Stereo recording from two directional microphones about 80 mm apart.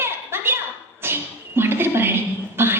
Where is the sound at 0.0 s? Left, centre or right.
Right.